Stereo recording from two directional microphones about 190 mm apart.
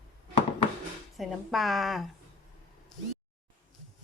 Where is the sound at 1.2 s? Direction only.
Centre (ahead or behind).